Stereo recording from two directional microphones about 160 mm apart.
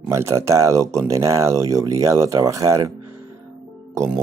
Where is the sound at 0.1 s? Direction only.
15° right (ahead or behind).